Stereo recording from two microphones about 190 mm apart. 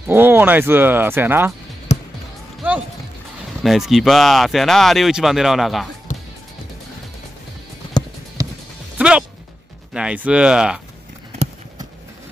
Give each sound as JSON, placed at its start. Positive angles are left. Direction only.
{"t": 0.1, "sound": "speech", "side_deg": -10}
{"t": 1.9, "sound": "basketball bounce", "side_deg": 40}
{"t": 3.6, "sound": "speech", "side_deg": 0}
{"t": 6.1, "sound": "music", "side_deg": 40}
{"t": 8.0, "sound": "music", "side_deg": 20}
{"t": 8.4, "sound": "music", "side_deg": -20}
{"t": 8.9, "sound": "music", "side_deg": -5}
{"t": 9.9, "sound": "speech", "side_deg": -5}